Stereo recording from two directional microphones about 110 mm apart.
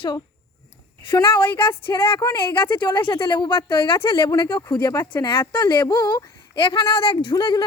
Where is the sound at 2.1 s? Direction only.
40° left (ahead or behind).